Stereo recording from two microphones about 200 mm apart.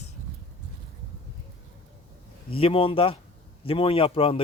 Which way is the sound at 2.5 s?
25° left (ahead or behind).